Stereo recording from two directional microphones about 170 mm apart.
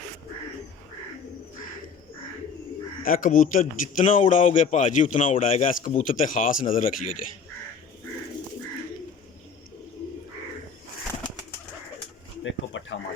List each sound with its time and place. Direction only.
3.0 s speech: 55° left (ahead or behind)
12.4 s bird: 90° left